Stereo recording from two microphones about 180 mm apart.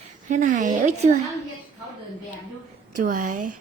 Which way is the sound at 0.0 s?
45° right (ahead or behind).